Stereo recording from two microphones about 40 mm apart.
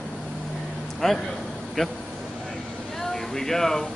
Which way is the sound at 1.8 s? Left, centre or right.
Centre.